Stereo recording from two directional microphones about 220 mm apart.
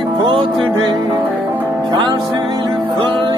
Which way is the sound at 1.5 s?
10° right (ahead or behind).